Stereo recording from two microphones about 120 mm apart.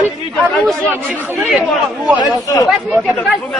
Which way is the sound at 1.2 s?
10° right (ahead or behind).